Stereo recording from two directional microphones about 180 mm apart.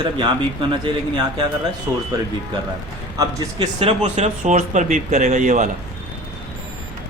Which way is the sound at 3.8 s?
35° right (ahead or behind).